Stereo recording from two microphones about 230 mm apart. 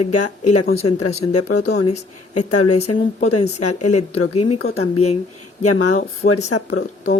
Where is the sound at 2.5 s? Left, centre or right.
Left.